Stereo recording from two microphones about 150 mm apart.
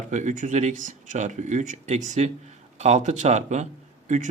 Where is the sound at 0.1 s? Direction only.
55° right (ahead or behind).